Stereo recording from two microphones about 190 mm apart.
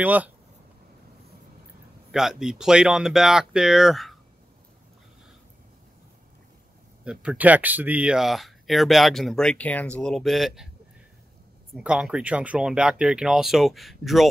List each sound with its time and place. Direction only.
0.0 s speech: 10° right (ahead or behind)
2.1 s speech: 5° right (ahead or behind)
7.1 s speech: 5° right (ahead or behind)
11.7 s speech: 5° right (ahead or behind)